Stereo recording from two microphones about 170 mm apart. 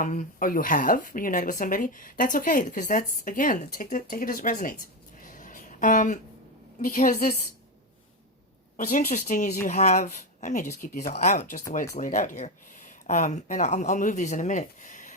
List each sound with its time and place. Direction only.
0.0 s speech: 50° left (ahead or behind)
5.2 s a sound: 50° left (ahead or behind)
6.8 s speech: 50° left (ahead or behind)
8.7 s speech: 55° left (ahead or behind)